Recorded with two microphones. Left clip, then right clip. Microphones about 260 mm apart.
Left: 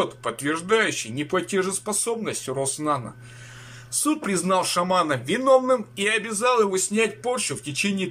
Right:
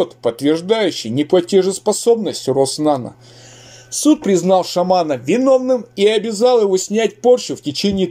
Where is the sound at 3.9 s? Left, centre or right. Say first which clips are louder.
Right 11 dB; centre.